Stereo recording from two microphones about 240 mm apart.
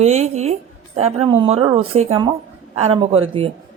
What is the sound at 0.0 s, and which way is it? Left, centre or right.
A woman's voice, right.